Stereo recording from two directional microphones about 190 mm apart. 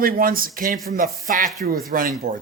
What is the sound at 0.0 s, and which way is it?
Speech, 50° right (ahead or behind).